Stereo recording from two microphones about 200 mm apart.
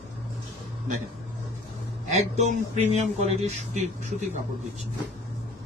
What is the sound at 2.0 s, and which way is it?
Speech, 35° right (ahead or behind).